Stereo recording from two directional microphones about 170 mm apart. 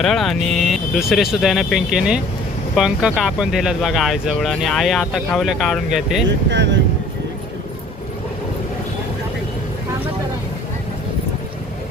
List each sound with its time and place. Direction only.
0.0 s speech: centre (ahead or behind)
6.5 s speech: 90° right